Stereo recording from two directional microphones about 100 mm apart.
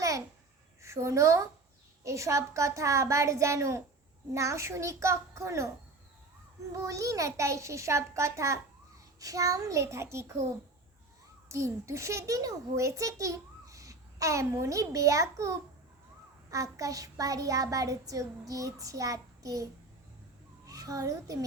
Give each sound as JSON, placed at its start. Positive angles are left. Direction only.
{"t": 0.8, "sound": "a woman's voice", "side_deg": -30}
{"t": 6.7, "sound": "a child's voice", "side_deg": -30}
{"t": 11.4, "sound": "a child's voice", "side_deg": -30}
{"t": 20.7, "sound": "a child's voice", "side_deg": -35}